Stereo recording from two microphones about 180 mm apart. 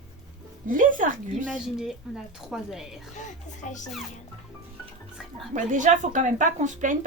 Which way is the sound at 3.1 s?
40° left (ahead or behind).